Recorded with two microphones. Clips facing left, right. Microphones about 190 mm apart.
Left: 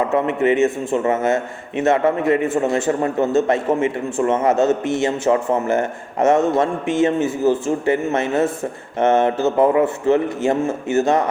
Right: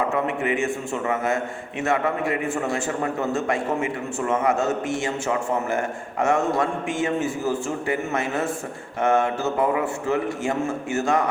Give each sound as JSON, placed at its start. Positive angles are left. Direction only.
{"t": 0.3, "sound": "a man's voice", "side_deg": 20}